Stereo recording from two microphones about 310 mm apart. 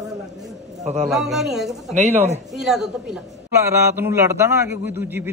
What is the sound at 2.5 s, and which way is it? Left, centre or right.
A woman's voice, centre.